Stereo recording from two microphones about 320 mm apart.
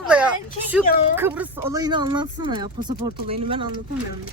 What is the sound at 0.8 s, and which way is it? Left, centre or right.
Speech, left.